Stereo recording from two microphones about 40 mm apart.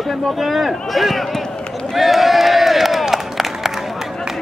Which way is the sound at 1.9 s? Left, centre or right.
Centre.